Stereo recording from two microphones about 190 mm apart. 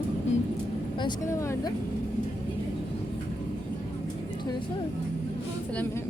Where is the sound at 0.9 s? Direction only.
20° left (ahead or behind).